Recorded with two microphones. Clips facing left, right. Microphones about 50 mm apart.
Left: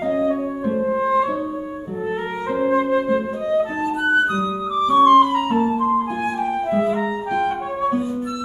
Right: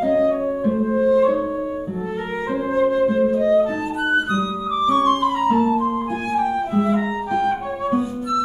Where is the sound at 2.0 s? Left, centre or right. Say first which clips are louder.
Left 1 dB; left.